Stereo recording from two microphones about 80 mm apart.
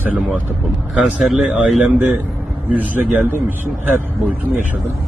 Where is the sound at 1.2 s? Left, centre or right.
Centre.